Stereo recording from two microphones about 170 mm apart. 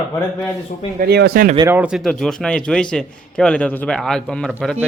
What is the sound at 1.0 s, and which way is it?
Speech, 70° right (ahead or behind).